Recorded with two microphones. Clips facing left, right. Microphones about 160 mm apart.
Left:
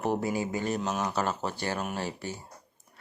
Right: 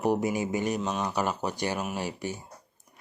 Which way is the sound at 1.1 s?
15° right (ahead or behind).